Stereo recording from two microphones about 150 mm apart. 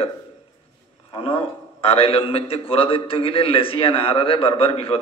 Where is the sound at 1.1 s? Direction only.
35° left (ahead or behind).